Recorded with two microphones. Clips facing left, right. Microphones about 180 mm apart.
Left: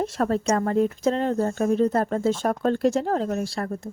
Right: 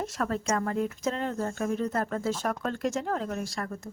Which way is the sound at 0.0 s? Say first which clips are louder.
Left 7 dB; 30° left (ahead or behind).